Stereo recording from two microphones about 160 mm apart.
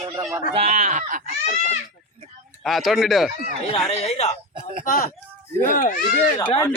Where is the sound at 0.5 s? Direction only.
45° right (ahead or behind).